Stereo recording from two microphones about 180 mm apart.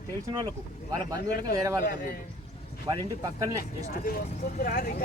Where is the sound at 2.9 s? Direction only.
20° right (ahead or behind).